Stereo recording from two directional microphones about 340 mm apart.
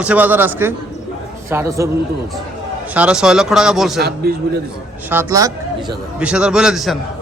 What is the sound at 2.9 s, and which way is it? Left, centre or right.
A man's voice, centre.